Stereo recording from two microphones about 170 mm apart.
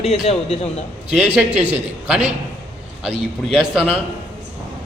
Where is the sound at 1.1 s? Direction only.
10° right (ahead or behind).